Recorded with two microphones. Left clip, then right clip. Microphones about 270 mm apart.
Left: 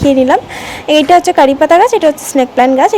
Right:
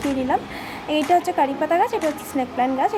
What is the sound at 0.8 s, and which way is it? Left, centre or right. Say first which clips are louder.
A woman's voice: left 12 dB; left.